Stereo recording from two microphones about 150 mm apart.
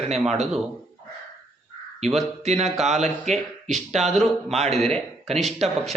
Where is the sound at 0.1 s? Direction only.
45° right (ahead or behind).